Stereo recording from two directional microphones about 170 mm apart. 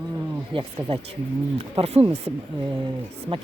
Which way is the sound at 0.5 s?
30° right (ahead or behind).